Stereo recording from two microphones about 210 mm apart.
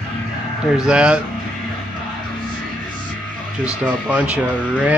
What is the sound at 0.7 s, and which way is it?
Speech, 5° right (ahead or behind).